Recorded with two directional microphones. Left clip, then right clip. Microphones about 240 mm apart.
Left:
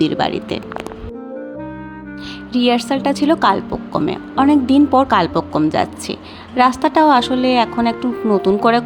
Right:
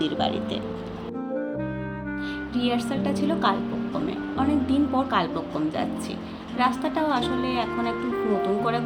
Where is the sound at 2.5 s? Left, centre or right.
Left.